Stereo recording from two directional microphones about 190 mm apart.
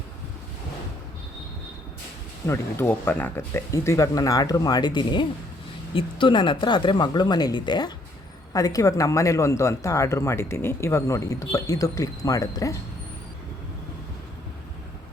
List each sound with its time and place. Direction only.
2.5 s speech: 10° left (ahead or behind)